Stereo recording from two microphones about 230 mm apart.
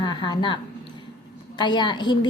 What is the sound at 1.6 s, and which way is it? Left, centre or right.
Speech, centre.